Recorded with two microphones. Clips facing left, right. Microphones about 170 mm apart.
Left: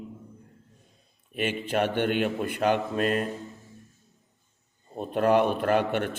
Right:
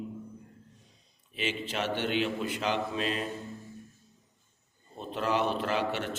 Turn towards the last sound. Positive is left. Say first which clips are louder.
# left 6 dB
turn(degrees=55)  # may be behind; listen again after turning